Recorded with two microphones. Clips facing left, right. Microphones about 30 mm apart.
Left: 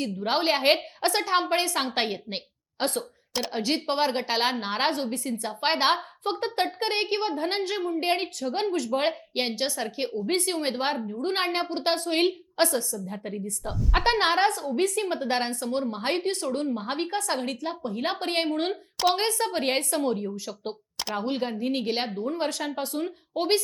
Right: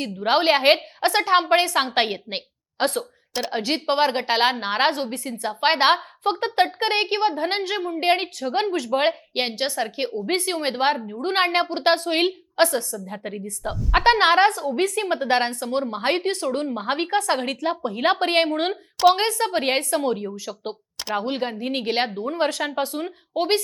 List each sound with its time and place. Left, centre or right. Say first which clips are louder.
0.0 s a woman's voice: right 5 dB; right
14.9 s a woman's voice: right 5 dB; right